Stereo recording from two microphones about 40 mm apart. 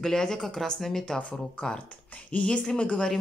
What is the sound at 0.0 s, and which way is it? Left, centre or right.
Speech, centre.